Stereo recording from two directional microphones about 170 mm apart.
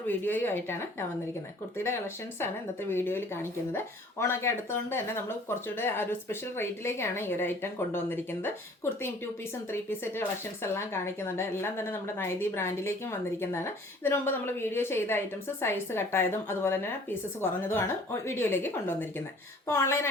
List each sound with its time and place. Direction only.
0.1 s speech: 10° left (ahead or behind)